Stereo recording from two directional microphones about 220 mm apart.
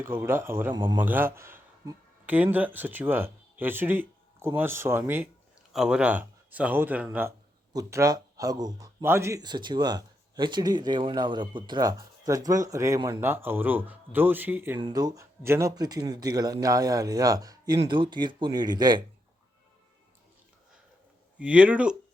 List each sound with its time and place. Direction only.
0.0 s speech: 10° right (ahead or behind)
14.8 s speech: 20° right (ahead or behind)
21.3 s speech: 5° right (ahead or behind)